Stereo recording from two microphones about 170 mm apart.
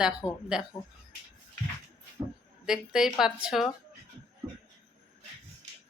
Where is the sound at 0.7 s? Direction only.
25° left (ahead or behind).